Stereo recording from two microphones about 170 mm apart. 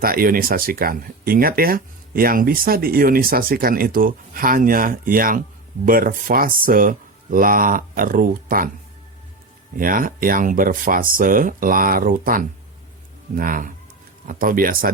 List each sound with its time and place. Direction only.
0.0 s speech: 60° right (ahead or behind)
9.7 s speech: 55° right (ahead or behind)